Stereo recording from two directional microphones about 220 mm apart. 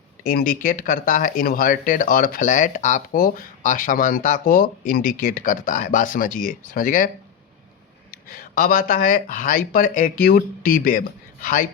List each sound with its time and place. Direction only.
0.3 s speech: 40° left (ahead or behind)
8.1 s speech: 40° left (ahead or behind)